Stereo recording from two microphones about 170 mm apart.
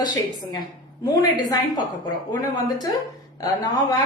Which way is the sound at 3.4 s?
20° left (ahead or behind).